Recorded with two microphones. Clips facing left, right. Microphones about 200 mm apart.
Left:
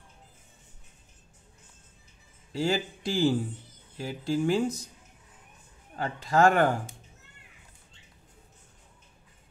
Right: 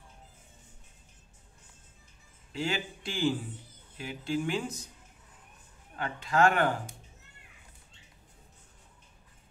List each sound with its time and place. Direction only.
2.5 s speech: 35° left (ahead or behind)
5.9 s speech: 35° left (ahead or behind)